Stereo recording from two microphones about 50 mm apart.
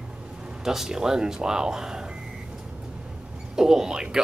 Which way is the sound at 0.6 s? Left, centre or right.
Centre.